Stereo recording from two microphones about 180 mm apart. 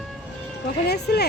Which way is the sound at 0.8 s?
65° left (ahead or behind).